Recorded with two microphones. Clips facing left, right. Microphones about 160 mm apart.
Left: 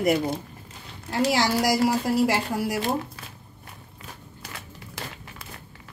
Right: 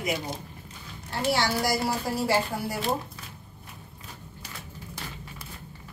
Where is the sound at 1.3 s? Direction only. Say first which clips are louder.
Left 2 dB; 90° left.